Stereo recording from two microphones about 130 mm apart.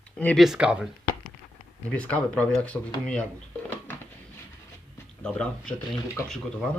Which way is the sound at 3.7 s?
15° left (ahead or behind).